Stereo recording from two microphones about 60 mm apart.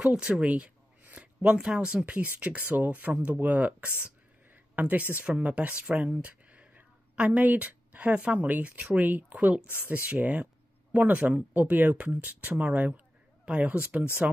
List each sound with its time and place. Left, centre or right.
0.0 s speech: centre
2.2 s speech: right